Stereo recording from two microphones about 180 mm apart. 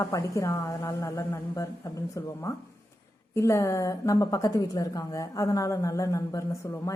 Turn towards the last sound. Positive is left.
turn(degrees=15)  # may be behind; listen again after turning